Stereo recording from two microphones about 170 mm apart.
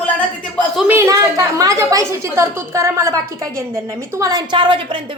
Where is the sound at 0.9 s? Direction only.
15° right (ahead or behind).